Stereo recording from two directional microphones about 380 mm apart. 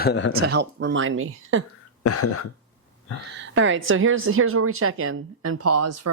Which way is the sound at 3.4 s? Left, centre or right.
Right.